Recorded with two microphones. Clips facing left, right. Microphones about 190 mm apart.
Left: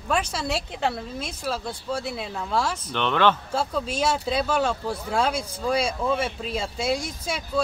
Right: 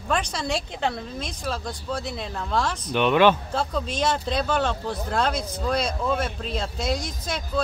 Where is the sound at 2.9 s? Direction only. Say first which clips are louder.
Right 4 dB; 10° right (ahead or behind).